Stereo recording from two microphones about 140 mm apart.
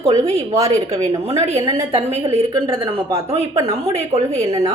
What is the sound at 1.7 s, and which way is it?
Speech, 50° right (ahead or behind).